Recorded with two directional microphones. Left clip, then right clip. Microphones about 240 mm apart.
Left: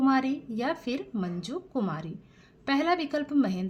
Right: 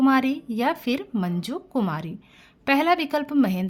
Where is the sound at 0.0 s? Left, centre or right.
Right.